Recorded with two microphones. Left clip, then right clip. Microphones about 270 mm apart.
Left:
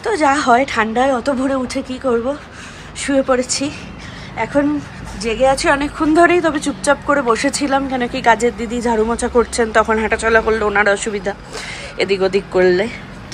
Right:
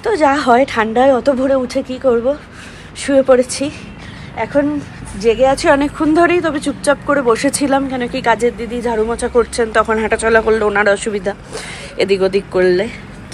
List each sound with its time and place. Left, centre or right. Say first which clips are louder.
0.0 s a woman's voice: right 2 dB; centre